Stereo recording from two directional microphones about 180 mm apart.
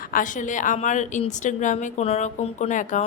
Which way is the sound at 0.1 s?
45° left (ahead or behind).